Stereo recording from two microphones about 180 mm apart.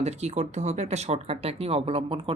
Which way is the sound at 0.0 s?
35° right (ahead or behind).